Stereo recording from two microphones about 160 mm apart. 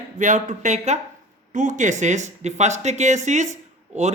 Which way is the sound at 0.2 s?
50° right (ahead or behind).